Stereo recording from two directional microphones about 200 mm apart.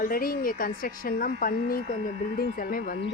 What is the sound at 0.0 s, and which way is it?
Speech, 45° left (ahead or behind).